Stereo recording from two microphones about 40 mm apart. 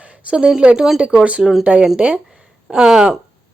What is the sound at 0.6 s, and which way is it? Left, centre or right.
A woman's voice, right.